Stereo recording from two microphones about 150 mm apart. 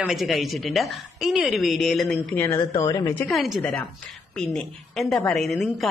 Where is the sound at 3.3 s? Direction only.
Centre (ahead or behind).